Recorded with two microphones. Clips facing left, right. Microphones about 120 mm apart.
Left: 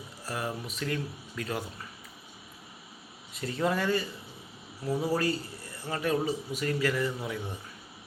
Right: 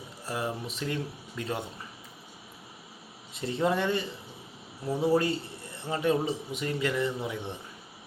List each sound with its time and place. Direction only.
0.3 s a man's voice: 25° right (ahead or behind)
3.3 s a man's voice: 25° right (ahead or behind)